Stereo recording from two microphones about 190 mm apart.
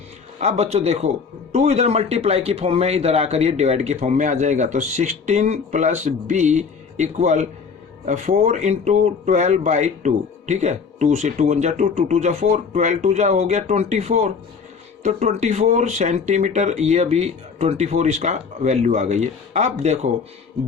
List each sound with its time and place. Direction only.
0.3 s speech: 35° right (ahead or behind)